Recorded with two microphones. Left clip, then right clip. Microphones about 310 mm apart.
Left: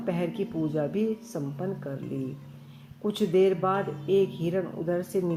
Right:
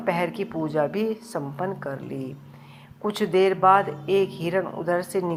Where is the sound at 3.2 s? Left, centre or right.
Right.